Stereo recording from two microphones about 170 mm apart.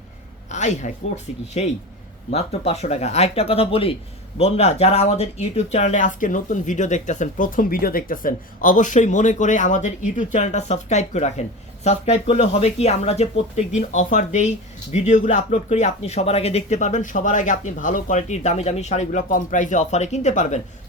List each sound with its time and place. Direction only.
0.5 s speech: 45° left (ahead or behind)